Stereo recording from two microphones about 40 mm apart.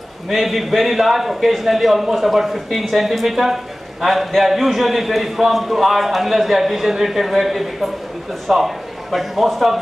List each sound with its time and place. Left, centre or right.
0.3 s a man's voice: centre